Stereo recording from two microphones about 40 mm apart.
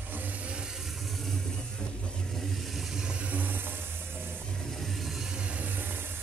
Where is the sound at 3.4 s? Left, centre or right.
Right.